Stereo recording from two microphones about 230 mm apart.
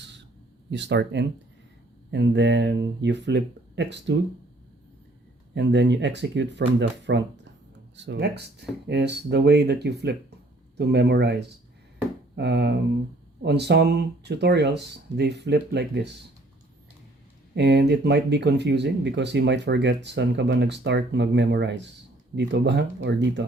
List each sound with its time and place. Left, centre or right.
0.7 s speech: right
5.5 s speech: right
17.5 s speech: right